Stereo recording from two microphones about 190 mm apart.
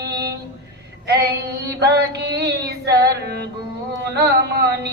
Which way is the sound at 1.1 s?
60° right (ahead or behind).